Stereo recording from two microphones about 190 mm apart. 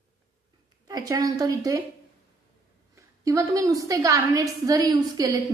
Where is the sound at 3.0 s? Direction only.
15° right (ahead or behind).